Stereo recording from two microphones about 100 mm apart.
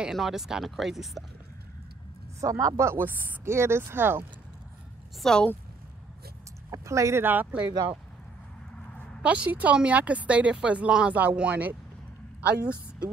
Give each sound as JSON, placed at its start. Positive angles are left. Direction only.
{"t": 0.0, "sound": "speech", "side_deg": -5}
{"t": 2.4, "sound": "speech", "side_deg": -30}
{"t": 5.2, "sound": "speech", "side_deg": 5}
{"t": 6.7, "sound": "speech", "side_deg": -30}
{"t": 9.2, "sound": "speech", "side_deg": -15}